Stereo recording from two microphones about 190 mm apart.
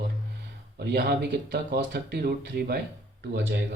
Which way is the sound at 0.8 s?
60° right (ahead or behind).